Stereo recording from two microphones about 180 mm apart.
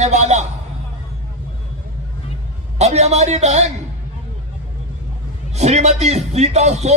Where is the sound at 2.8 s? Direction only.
40° right (ahead or behind).